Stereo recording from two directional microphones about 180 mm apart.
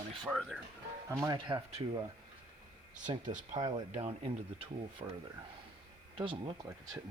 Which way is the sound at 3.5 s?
40° right (ahead or behind).